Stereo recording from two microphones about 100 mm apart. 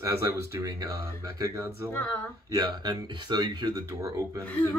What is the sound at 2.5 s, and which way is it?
Speech, 45° right (ahead or behind).